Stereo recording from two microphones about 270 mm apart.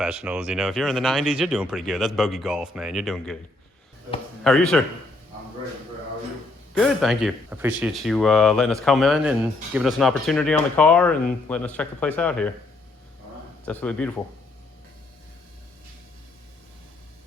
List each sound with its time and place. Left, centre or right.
0.0 s speech: centre
4.4 s speech: centre
6.7 s speech: centre
13.7 s speech: centre